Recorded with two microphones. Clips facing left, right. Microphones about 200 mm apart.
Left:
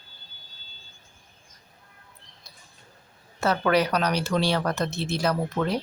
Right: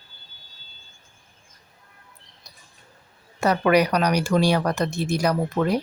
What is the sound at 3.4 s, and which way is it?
Speech, 15° right (ahead or behind).